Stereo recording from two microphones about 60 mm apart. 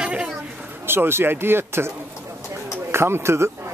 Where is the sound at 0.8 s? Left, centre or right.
Right.